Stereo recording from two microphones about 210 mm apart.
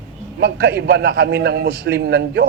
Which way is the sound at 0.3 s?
55° right (ahead or behind).